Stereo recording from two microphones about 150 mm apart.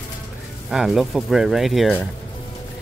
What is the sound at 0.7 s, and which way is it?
Speech, centre (ahead or behind).